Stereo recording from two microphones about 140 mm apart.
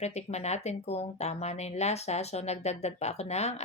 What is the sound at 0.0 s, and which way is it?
Speech, 50° left (ahead or behind).